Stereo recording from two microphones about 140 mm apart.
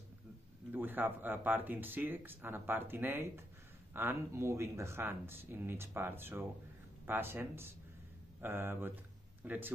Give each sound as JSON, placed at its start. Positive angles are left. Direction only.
{"t": 0.7, "sound": "speech", "side_deg": -15}